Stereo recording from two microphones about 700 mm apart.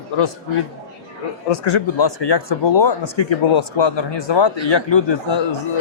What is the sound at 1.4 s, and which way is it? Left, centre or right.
Speech, left.